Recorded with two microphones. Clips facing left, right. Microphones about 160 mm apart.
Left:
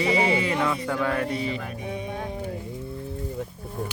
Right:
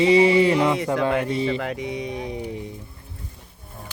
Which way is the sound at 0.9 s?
20° right (ahead or behind).